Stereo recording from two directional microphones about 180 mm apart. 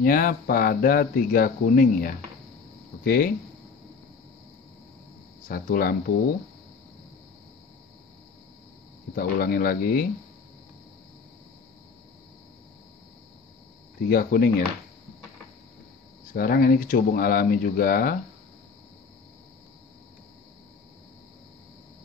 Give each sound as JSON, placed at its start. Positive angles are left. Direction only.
{"t": 0.0, "sound": "speech", "side_deg": 50}
{"t": 5.5, "sound": "speech", "side_deg": 55}
{"t": 9.1, "sound": "speech", "side_deg": 55}
{"t": 14.0, "sound": "speech", "side_deg": 55}
{"t": 16.3, "sound": "speech", "side_deg": 55}